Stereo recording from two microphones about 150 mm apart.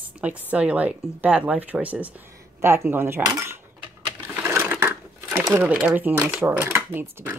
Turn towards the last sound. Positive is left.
turn(degrees=-15)  # may be behind; listen again after turning